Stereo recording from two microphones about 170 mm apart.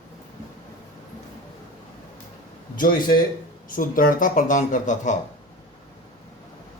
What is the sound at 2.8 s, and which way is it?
Speech, 55° left (ahead or behind).